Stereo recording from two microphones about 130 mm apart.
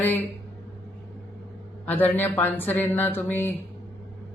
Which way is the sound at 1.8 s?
15° left (ahead or behind).